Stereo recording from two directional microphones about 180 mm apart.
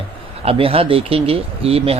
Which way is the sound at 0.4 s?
30° right (ahead or behind).